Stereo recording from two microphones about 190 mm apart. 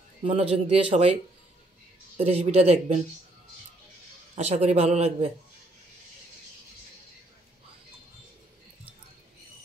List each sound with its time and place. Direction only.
0.2 s a man's voice: 30° right (ahead or behind)
2.1 s a man's voice: 35° right (ahead or behind)
4.4 s a man's voice: 35° right (ahead or behind)